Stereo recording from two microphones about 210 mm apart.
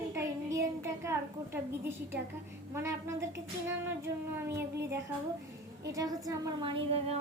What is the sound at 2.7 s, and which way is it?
A child's voice, 15° right (ahead or behind).